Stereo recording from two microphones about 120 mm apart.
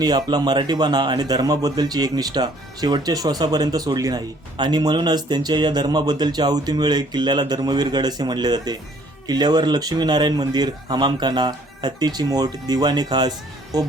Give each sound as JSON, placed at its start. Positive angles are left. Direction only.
{"t": 0.0, "sound": "speech", "side_deg": -35}